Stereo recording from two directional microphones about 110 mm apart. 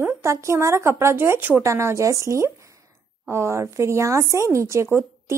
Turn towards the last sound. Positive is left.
turn(degrees=-20)  # may be behind; listen again after turning